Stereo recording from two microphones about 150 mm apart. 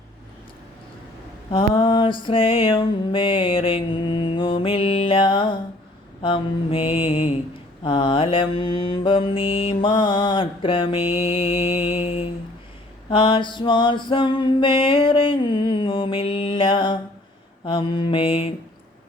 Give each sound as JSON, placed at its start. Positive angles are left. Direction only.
{"t": 1.5, "sound": "mantra", "side_deg": 35}